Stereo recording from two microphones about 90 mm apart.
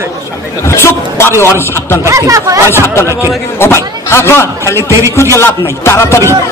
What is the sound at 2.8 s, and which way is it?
A man's voice, 30° left (ahead or behind).